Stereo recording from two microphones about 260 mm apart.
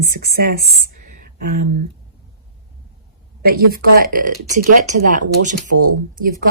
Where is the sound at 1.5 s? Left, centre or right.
Right.